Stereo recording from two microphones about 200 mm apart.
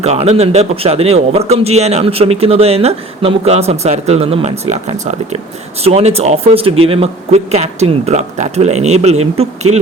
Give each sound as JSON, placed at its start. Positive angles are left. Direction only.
{"t": 0.0, "sound": "speech", "side_deg": -30}